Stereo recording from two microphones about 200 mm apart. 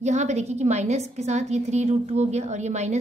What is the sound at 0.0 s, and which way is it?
A woman's voice, 35° right (ahead or behind).